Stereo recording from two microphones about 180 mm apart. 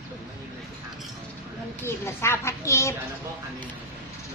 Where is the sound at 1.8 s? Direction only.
15° left (ahead or behind).